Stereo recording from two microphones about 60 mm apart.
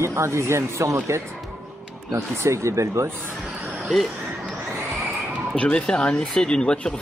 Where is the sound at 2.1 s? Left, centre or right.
Right.